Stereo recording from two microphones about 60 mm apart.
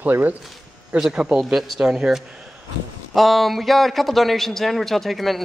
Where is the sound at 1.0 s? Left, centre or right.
Centre.